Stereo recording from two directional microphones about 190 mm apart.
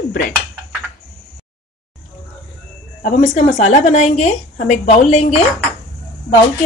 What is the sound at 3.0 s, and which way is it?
A woman's voice, 40° left (ahead or behind).